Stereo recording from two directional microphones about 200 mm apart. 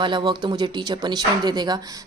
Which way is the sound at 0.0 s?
25° right (ahead or behind).